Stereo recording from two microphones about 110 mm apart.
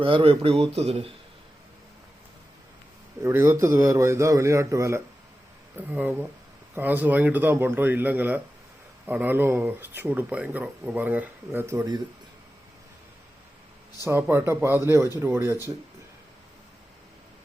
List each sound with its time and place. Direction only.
0.0 s speech: 55° right (ahead or behind)
3.2 s a man's voice: 25° right (ahead or behind)
14.0 s a man's voice: 20° right (ahead or behind)